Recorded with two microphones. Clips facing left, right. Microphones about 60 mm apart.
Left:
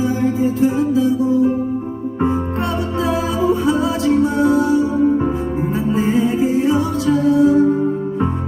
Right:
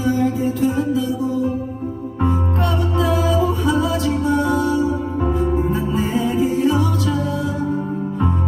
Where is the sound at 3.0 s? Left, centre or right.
Left.